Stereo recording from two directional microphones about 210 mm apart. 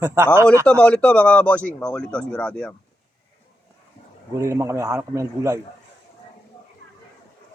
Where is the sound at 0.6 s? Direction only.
5° left (ahead or behind).